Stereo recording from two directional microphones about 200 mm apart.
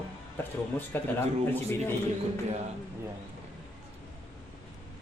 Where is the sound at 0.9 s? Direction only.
10° left (ahead or behind).